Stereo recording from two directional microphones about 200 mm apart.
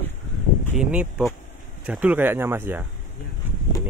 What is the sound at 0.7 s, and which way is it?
Speech, 5° right (ahead or behind).